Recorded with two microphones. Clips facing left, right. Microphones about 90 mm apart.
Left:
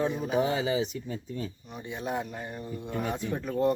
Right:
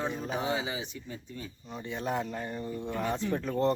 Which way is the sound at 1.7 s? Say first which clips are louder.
Right 1 dB; 15° left (ahead or behind).